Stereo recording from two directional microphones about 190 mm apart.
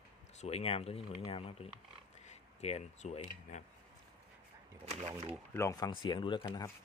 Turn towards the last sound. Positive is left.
turn(degrees=25)  # may be behind; listen again after turning